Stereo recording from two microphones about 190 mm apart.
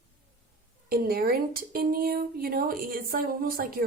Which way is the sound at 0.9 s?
50° right (ahead or behind).